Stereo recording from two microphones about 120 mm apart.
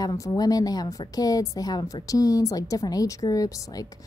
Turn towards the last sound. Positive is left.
turn(degrees=30)  # may be behind; listen again after turning